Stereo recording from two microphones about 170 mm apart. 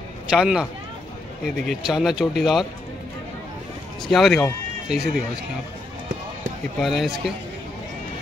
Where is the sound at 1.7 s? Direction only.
5° right (ahead or behind).